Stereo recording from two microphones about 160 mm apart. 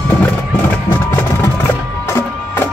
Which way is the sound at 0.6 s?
15° left (ahead or behind).